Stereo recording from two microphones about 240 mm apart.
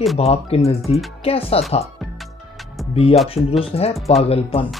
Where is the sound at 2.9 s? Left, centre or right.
Left.